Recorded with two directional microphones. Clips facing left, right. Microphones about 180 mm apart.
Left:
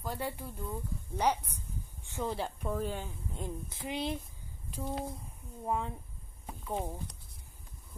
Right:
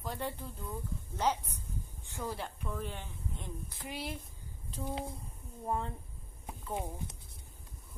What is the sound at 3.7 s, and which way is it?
Speech, 20° left (ahead or behind).